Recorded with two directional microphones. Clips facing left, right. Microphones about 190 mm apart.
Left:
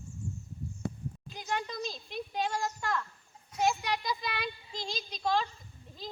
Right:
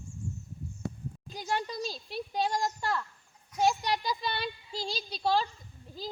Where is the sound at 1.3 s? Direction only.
35° right (ahead or behind).